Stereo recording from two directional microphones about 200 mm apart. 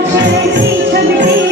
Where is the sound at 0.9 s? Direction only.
55° right (ahead or behind).